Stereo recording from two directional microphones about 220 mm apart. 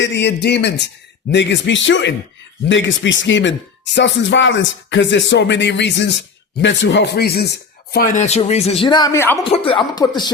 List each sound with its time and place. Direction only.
0.0 s speech: 50° left (ahead or behind); by 9.4 s 10° left (ahead or behind)
9.4 s speech: 25° left (ahead or behind)